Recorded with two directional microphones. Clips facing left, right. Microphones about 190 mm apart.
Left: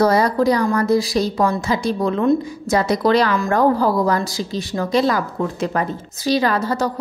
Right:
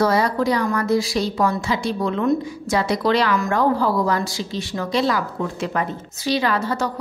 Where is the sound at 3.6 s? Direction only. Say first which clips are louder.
Left 4 dB; 40° left (ahead or behind).